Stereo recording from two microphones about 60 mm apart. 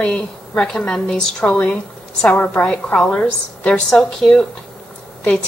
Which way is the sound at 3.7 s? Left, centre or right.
Centre.